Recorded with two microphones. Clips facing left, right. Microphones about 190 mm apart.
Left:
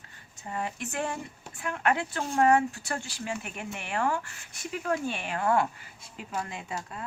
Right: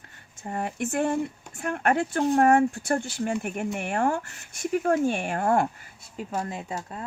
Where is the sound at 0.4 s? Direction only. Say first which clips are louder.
Right 5 dB; 50° right (ahead or behind).